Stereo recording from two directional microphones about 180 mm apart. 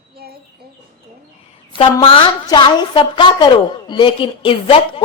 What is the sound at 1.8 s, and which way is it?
A woman's voice, 30° left (ahead or behind).